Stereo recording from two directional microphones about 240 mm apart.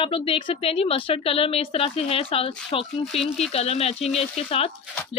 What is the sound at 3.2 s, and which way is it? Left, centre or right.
Speech, centre.